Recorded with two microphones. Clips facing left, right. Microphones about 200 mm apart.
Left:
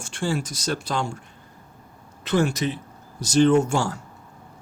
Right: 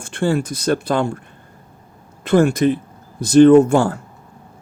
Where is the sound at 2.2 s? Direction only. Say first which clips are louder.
Right 8 dB; 55° right (ahead or behind).